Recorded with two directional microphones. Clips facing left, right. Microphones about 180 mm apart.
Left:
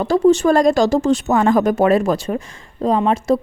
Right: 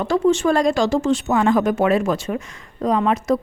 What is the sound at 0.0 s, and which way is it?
Speech, 35° left (ahead or behind).